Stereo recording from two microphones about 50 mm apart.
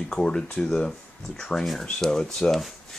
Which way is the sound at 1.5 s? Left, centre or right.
Centre.